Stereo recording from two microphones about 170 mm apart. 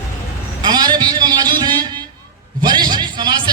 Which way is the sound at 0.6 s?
25° right (ahead or behind).